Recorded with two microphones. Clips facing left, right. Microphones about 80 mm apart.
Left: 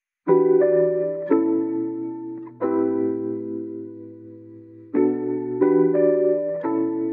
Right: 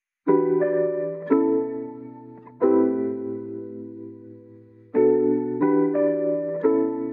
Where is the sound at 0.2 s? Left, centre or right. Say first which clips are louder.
Left 3 dB; centre.